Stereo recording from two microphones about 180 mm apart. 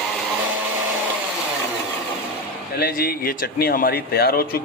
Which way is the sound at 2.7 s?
55° left (ahead or behind).